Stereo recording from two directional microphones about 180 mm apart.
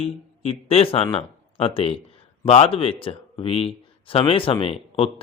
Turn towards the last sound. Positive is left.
turn(degrees=30)  # may be behind; listen again after turning